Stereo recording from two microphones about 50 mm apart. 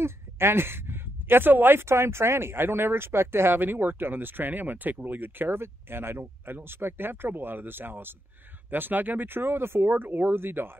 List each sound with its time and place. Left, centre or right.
0.0 s speech: right
3.5 s speech: right